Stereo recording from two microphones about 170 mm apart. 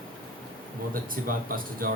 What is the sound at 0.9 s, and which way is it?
A man's voice, 55° right (ahead or behind).